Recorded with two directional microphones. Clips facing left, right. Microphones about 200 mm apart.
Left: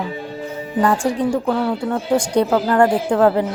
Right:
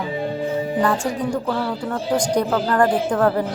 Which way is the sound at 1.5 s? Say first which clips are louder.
Left 4 dB; 25° left (ahead or behind).